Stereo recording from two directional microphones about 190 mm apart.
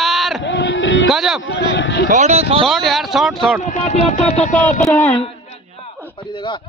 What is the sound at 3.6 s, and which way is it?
Music, 35° left (ahead or behind).